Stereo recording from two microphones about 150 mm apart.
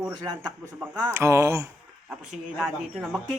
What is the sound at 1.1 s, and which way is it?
Music, 20° right (ahead or behind).